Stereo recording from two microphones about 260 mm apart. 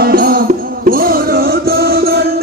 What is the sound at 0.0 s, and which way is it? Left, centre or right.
Music, right.